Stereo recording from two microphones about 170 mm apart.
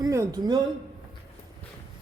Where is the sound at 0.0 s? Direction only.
20° right (ahead or behind).